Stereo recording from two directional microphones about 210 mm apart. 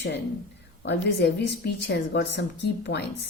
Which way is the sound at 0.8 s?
55° left (ahead or behind).